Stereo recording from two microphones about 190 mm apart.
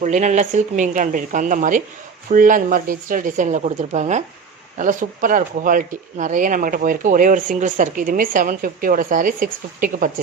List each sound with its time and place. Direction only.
0.0 s speech: 40° right (ahead or behind)